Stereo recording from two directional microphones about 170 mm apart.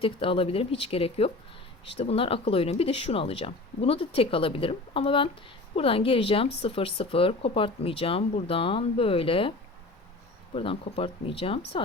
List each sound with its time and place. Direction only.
0.0 s speech: 30° left (ahead or behind)
10.5 s speech: 30° left (ahead or behind)